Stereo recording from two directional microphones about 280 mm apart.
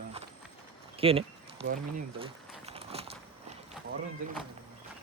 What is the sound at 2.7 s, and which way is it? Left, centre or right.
Biting, right.